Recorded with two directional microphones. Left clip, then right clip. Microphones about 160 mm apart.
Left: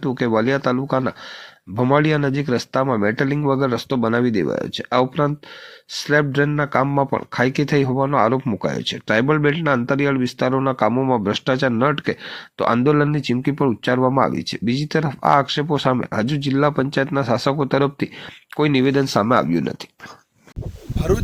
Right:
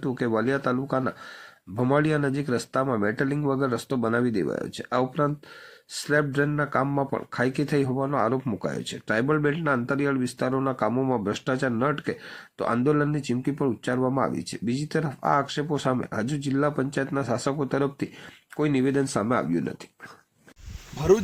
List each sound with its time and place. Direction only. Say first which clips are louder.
0.0 s speech: left 6 dB; 20° left (ahead or behind)